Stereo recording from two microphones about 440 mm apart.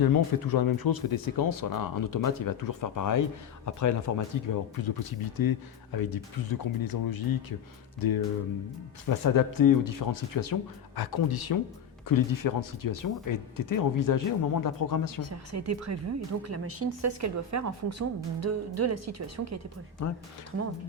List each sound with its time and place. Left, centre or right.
0.0 s speech: left
9.0 s speech: left
15.3 s speech: right